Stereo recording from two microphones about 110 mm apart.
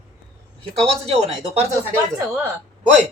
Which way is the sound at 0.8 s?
70° right (ahead or behind).